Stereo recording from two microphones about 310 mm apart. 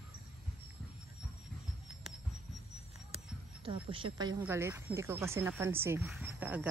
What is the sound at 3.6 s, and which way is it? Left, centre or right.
Speech, centre.